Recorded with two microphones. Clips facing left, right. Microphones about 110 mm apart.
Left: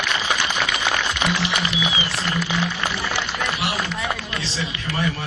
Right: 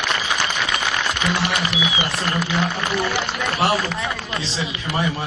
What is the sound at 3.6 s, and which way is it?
Speech, 45° right (ahead or behind).